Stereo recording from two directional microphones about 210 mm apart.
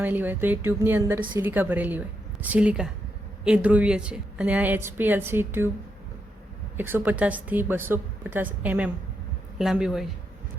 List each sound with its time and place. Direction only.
0.0 s a woman's voice: 10° right (ahead or behind)
6.7 s a woman's voice: 10° right (ahead or behind)